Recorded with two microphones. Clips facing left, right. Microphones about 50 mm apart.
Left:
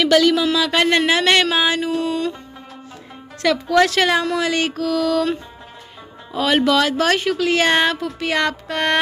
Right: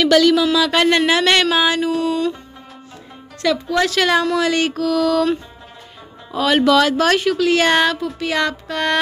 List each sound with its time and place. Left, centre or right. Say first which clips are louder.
0.0 s speech: right 2 dB; centre
2.0 s music: right 2 dB; left
3.4 s music: even; left
4.0 s speech: right 2 dB; centre
6.3 s speech: right 2 dB; centre
8.0 s music: even; left